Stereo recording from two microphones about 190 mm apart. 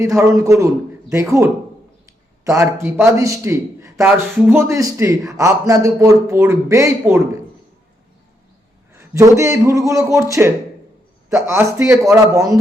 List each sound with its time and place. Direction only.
0.0 s a man's voice: 15° right (ahead or behind)
8.9 s a man's voice: 15° right (ahead or behind)